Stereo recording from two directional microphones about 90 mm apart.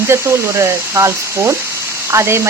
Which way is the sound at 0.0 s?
30° right (ahead or behind).